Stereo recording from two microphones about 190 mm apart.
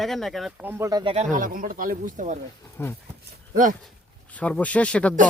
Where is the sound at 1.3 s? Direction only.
45° right (ahead or behind).